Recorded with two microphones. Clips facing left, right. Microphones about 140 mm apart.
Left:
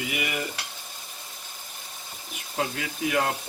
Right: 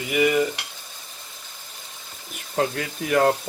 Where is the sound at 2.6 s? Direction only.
50° right (ahead or behind).